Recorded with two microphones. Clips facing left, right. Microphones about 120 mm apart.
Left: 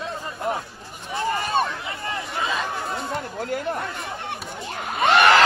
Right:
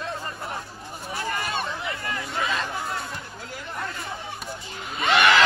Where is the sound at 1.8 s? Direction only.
25° left (ahead or behind).